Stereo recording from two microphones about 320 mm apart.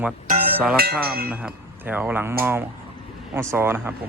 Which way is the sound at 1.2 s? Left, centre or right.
Centre.